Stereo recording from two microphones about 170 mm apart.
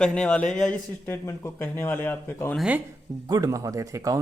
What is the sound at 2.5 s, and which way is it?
Speech, 5° right (ahead or behind).